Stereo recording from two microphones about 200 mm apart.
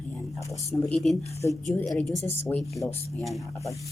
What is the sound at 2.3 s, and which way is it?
Speech, 15° left (ahead or behind).